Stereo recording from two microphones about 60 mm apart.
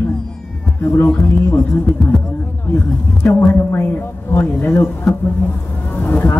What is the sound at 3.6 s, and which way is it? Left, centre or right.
Speech, left.